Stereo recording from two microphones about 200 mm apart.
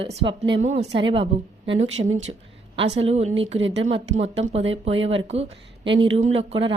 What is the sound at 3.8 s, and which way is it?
A woman's voice, 30° right (ahead or behind).